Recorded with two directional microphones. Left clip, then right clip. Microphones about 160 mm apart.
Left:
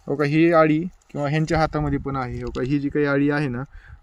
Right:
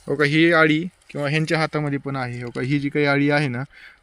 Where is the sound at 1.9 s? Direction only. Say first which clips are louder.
Even; 15° right (ahead or behind).